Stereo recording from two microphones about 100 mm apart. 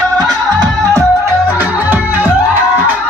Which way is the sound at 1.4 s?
20° right (ahead or behind).